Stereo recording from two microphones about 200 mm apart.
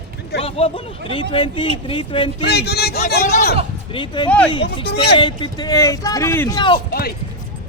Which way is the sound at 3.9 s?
25° left (ahead or behind).